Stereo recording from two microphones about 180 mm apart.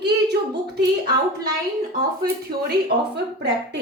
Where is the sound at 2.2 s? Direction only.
60° right (ahead or behind).